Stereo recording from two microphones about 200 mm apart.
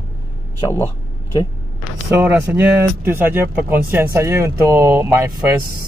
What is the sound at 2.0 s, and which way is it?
Speech, 10° right (ahead or behind).